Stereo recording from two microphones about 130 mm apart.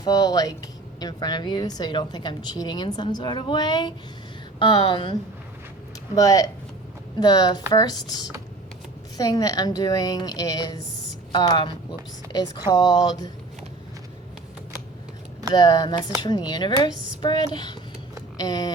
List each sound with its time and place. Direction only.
0.0 s a woman's voice: 30° left (ahead or behind)
6.1 s a woman's voice: 25° left (ahead or behind)
9.1 s a woman's voice: 30° left (ahead or behind)
15.5 s a woman's voice: 30° left (ahead or behind)